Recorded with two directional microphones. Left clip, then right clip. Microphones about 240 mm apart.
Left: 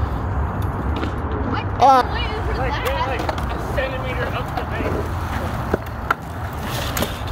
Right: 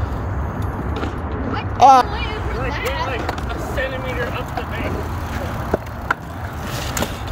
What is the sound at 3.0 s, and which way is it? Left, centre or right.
Vehicle, right.